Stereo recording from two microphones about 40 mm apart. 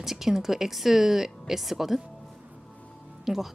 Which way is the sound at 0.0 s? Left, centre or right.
Centre.